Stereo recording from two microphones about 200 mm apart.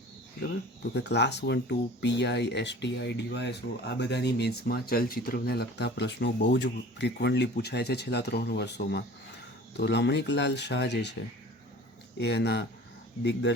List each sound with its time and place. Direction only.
0.3 s speech: 60° left (ahead or behind)